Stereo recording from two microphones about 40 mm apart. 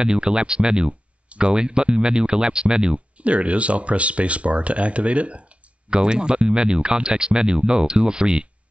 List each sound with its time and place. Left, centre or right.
0.0 s speech: right
3.2 s speech: right